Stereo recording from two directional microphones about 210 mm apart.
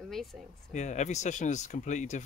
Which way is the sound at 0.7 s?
35° left (ahead or behind).